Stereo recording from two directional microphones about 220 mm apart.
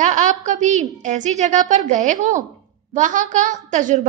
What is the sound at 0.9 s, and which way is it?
Child singing, 35° right (ahead or behind).